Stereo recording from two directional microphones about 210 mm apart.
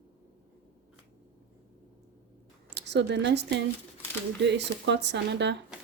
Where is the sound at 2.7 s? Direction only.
55° right (ahead or behind).